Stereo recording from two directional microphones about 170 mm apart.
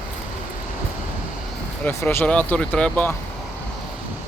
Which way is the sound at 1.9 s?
15° left (ahead or behind).